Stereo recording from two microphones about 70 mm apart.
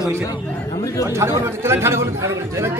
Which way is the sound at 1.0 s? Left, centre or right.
Right.